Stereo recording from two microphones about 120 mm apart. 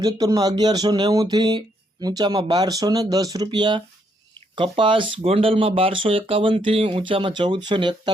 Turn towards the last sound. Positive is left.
turn(degrees=-40)  # may be behind; listen again after turning